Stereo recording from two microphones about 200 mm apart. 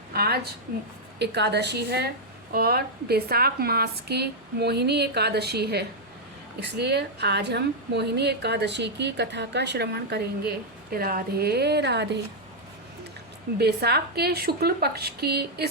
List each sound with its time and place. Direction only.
0.1 s a sound: 50° right (ahead or behind)
1.2 s a woman's voice: 55° right (ahead or behind)
13.6 s a woman's voice: 55° right (ahead or behind)